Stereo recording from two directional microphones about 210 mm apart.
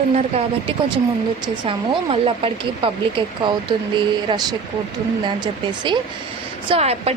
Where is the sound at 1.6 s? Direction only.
25° right (ahead or behind).